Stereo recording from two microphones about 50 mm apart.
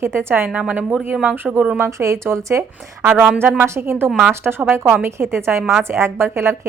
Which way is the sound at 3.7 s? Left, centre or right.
Right.